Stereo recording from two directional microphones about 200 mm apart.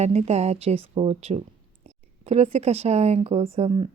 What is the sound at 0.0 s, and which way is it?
A woman's voice, 35° right (ahead or behind).